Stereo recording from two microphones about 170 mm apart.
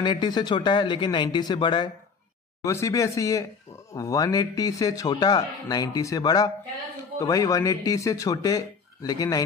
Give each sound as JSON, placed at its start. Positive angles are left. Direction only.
{"t": 0.0, "sound": "a man's voice", "side_deg": 25}
{"t": 2.6, "sound": "a man's voice", "side_deg": 15}